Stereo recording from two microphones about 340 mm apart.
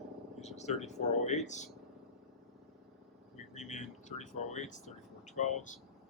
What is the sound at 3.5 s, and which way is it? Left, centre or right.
Speech, left.